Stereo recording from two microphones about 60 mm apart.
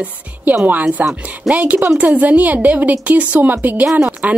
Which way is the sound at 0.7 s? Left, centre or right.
Right.